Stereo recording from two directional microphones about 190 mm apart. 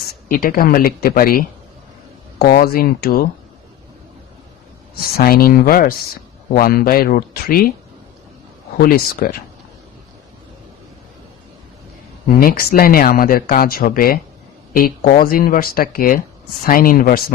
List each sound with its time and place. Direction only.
0.3 s speech: 50° left (ahead or behind)
5.1 s speech: 50° left (ahead or behind)
8.8 s speech: 50° left (ahead or behind)
12.4 s speech: 50° left (ahead or behind)